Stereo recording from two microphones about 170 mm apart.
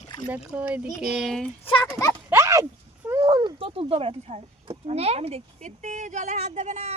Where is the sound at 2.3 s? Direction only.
15° right (ahead or behind).